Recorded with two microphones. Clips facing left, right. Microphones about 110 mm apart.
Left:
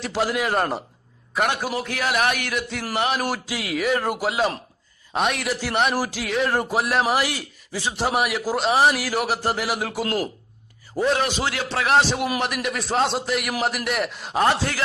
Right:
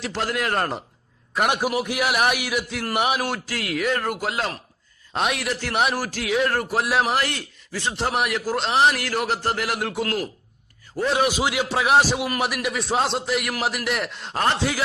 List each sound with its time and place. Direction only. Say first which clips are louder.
0.1 s a man's voice: left 3 dB; 10° left (ahead or behind)
1.5 s a man's voice: right 3 dB; 10° right (ahead or behind)
3.6 s a man's voice: left 1 dB; 5° left (ahead or behind)
4.0 s a man's voice: left 2 dB; 15° left (ahead or behind)
4.3 s a man's voice: left 4 dB; 5° left (ahead or behind)
6.0 s a man's voice: left 2 dB; 15° left (ahead or behind)
6.2 s a man's voice: right 3 dB; centre (ahead or behind)
6.5 s a man's voice: left 1 dB; 15° left (ahead or behind)
6.8 s a man's voice: left 1 dB; centre (ahead or behind)
11.2 s a man's voice: right 3 dB; 10° right (ahead or behind); by 14.6 s 5° left (ahead or behind)